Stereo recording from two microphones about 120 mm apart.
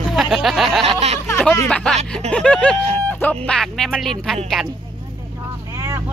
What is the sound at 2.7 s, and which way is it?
Speech, 60° right (ahead or behind).